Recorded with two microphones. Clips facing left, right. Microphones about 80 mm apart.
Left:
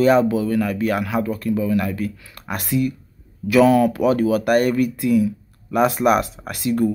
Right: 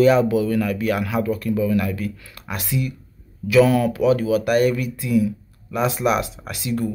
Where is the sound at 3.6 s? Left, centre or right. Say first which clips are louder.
Left 2 dB; left.